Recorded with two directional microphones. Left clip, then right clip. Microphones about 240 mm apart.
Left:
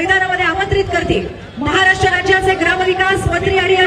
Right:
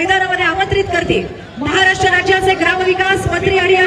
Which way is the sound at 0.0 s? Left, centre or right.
Right.